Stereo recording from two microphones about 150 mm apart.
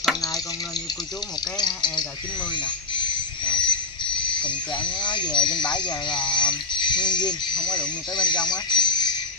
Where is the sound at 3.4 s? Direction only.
30° left (ahead or behind).